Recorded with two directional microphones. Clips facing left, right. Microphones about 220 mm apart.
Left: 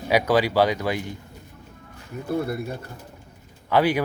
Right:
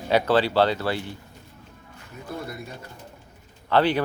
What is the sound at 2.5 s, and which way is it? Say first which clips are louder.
Speech: left 8 dB; 60° left (ahead or behind).